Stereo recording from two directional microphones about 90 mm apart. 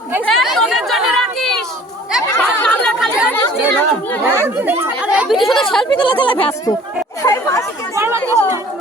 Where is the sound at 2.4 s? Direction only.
15° left (ahead or behind).